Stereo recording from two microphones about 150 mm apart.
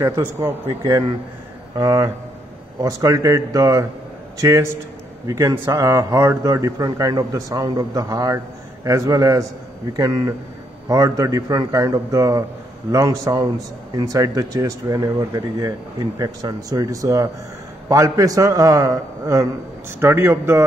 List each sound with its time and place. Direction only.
0.0 s a man's voice: 20° right (ahead or behind)